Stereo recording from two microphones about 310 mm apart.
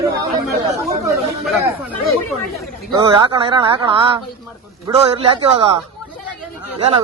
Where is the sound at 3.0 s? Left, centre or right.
Centre.